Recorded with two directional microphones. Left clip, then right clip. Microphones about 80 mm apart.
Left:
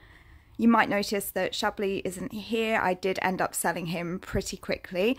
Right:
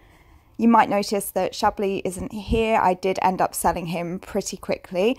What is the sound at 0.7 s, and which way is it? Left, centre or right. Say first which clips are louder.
A woman's voice: right 8 dB; right.